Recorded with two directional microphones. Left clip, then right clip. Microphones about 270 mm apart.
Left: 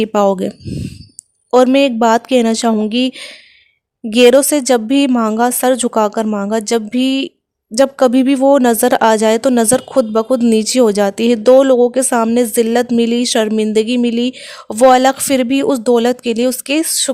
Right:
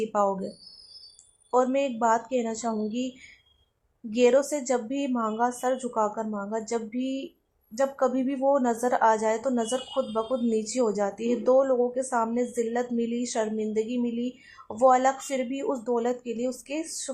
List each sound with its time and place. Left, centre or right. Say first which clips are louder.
0.0 s speech: left 12 dB; left
1.5 s speech: left 14 dB; left
4.1 s speech: left 13 dB; left